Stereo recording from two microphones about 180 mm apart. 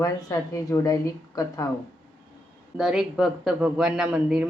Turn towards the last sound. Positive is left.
turn(degrees=-5)  # may be behind; listen again after turning